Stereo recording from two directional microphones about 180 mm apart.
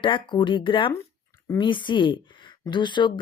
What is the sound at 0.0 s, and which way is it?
Speech, 25° left (ahead or behind).